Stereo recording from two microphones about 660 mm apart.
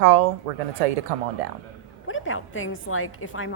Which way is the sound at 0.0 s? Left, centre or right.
Right.